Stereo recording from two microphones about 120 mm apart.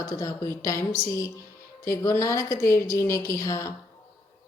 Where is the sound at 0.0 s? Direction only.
30° left (ahead or behind).